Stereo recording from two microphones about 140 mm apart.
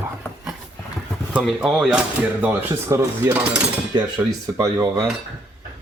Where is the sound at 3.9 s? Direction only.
30° right (ahead or behind).